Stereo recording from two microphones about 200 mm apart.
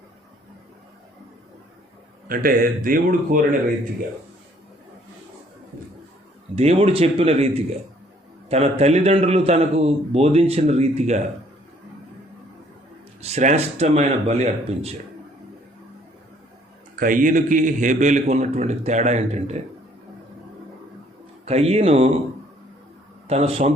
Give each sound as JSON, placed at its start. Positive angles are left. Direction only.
{"t": 2.2, "sound": "speech", "side_deg": -45}
{"t": 6.6, "sound": "a man's voice", "side_deg": -30}
{"t": 13.2, "sound": "a man's voice", "side_deg": -35}
{"t": 16.9, "sound": "a man's voice", "side_deg": -45}
{"t": 21.4, "sound": "a man's voice", "side_deg": -30}
{"t": 23.3, "sound": "a man's voice", "side_deg": -30}